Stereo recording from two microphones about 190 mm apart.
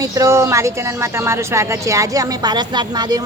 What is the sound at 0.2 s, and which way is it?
A woman's voice, 15° right (ahead or behind).